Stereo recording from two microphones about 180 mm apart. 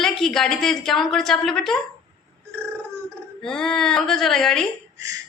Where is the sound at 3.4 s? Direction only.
5° left (ahead or behind).